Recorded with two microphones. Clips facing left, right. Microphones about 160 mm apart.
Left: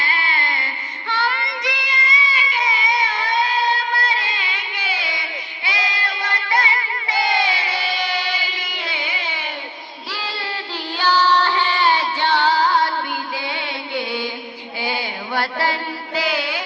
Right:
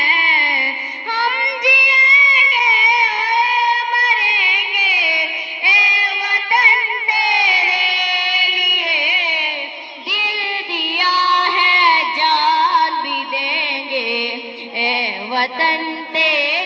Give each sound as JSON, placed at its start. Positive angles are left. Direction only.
{"t": 0.0, "sound": "music", "side_deg": -20}
{"t": 1.1, "sound": "child singing", "side_deg": -20}
{"t": 5.6, "sound": "music", "side_deg": -20}
{"t": 10.1, "sound": "child singing", "side_deg": -20}
{"t": 14.8, "sound": "music", "side_deg": -20}